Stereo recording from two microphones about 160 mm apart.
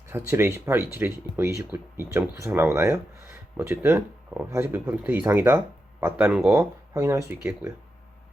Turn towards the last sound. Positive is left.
turn(degrees=-20)  # may be behind; listen again after turning